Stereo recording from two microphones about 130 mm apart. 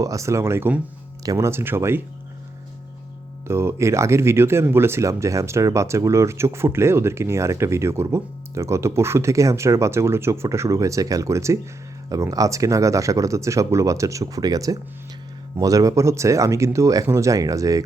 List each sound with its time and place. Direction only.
0.0 s speech: 25° right (ahead or behind)
3.4 s speech: 20° right (ahead or behind)